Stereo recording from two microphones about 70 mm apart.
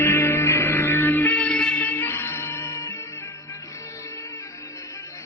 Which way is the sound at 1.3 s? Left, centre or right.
Centre.